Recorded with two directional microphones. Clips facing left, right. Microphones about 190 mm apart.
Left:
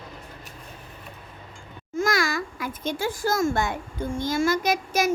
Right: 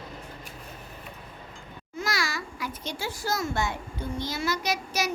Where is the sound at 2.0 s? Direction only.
50° left (ahead or behind).